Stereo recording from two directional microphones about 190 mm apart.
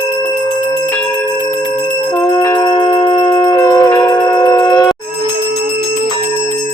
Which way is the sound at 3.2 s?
25° left (ahead or behind).